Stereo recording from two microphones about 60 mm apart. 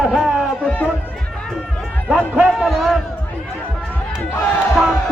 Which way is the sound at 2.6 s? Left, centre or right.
Centre.